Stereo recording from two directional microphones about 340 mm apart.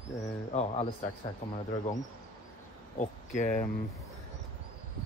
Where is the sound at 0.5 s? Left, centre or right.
Centre.